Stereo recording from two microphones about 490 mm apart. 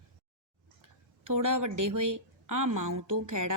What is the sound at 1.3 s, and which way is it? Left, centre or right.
Speech, right.